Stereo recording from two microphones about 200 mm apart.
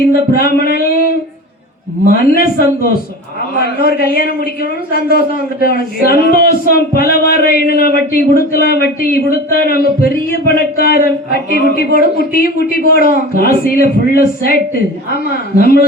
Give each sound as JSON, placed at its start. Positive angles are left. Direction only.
{"t": 0.1, "sound": "speech", "side_deg": 45}
{"t": 2.1, "sound": "speech", "side_deg": 45}